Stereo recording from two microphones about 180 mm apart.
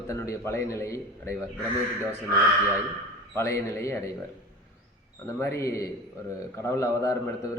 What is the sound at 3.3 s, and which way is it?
Speech, 15° left (ahead or behind).